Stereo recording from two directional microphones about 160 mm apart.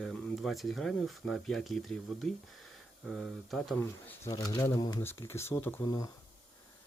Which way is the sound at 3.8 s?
15° left (ahead or behind).